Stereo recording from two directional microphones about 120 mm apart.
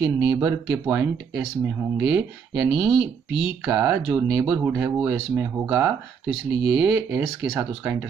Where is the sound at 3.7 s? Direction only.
20° right (ahead or behind).